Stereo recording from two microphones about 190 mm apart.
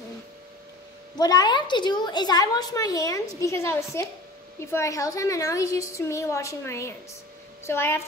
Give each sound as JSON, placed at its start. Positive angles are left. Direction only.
{"t": 1.1, "sound": "a woman's voice", "side_deg": 20}